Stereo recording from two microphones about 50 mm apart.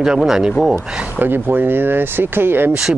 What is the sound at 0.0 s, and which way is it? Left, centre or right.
Speech, centre.